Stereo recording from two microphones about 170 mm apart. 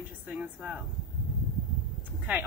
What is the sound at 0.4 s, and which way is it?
Speech, 5° right (ahead or behind).